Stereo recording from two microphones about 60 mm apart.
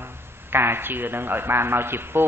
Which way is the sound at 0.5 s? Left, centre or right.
Right.